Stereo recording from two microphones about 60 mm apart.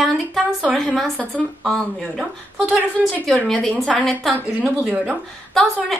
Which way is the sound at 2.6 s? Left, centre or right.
Right.